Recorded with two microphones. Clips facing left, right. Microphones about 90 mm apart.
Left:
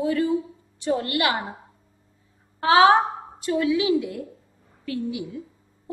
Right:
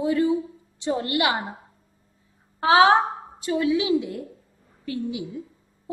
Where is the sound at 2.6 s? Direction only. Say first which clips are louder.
Left 1 dB; 20° right (ahead or behind).